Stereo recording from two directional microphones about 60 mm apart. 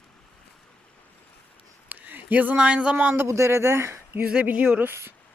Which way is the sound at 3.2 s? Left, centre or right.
Right.